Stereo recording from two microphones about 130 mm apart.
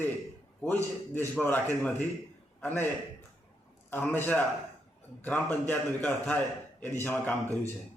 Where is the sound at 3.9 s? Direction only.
15° left (ahead or behind).